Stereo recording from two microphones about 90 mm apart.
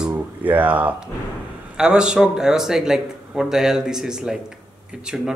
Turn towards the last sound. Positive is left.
turn(degrees=-5)  # may be behind; listen again after turning